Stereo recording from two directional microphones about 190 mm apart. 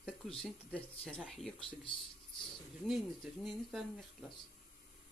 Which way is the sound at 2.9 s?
Centre (ahead or behind).